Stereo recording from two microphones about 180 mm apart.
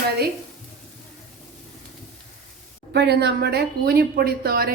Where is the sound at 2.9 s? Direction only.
65° right (ahead or behind).